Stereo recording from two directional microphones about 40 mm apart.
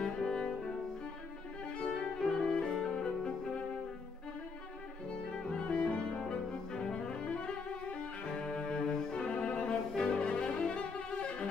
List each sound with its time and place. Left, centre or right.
0.0 s music: centre
1.7 s music: centre
5.3 s music: left
6.1 s bowed string instrument: centre